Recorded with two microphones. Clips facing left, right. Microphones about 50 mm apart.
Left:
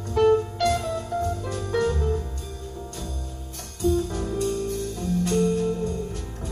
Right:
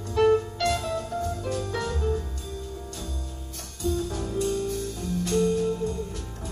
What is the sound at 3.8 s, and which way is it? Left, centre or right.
Music, left.